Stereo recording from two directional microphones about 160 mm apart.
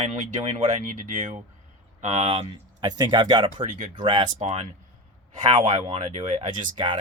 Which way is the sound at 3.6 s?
50° right (ahead or behind).